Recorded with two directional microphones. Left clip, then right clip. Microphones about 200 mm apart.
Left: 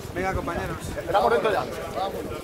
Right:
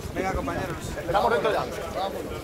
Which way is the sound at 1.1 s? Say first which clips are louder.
Left 2 dB; 50° left (ahead or behind).